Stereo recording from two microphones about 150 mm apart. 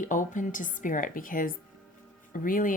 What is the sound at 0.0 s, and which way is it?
Speech, 60° left (ahead or behind).